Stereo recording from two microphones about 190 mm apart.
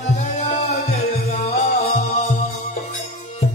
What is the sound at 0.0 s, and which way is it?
Music, 35° left (ahead or behind).